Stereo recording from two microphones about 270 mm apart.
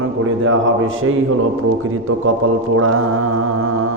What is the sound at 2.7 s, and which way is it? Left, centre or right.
Speech, right.